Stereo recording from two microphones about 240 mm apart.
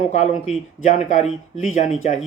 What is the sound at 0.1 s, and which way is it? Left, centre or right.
Speech, left.